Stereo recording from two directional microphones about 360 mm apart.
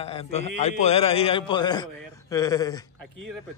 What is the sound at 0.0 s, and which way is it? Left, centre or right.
A man's voice, centre.